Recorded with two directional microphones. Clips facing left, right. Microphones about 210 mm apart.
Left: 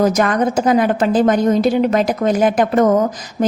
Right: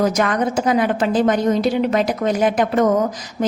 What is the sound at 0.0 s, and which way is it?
Speech, 45° left (ahead or behind).